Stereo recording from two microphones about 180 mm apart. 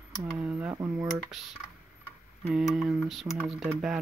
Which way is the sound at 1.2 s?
Centre (ahead or behind).